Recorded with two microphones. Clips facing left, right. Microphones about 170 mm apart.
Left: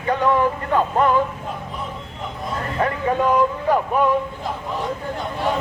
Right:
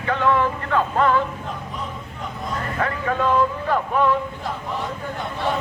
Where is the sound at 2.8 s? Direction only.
20° left (ahead or behind).